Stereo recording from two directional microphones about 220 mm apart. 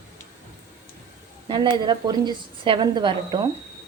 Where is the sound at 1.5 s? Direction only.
20° right (ahead or behind).